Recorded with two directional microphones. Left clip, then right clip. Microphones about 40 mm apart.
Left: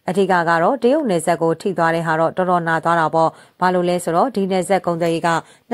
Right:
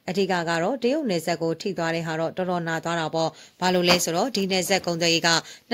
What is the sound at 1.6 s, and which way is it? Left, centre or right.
Speech, left.